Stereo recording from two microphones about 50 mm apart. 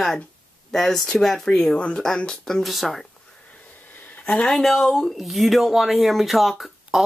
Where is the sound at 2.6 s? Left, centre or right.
Centre.